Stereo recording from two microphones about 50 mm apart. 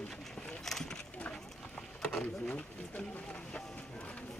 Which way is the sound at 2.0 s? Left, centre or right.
Centre.